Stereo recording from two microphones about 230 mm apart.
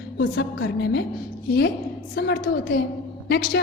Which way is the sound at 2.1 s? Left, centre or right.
Left.